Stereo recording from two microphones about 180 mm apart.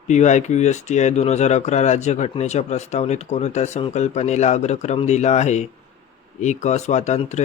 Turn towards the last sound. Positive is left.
turn(degrees=40)  # may be behind; listen again after turning